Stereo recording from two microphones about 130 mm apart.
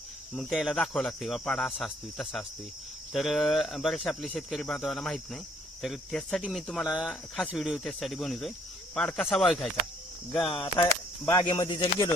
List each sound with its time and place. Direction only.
0.3 s speech: centre (ahead or behind)
10.3 s speech: 35° left (ahead or behind)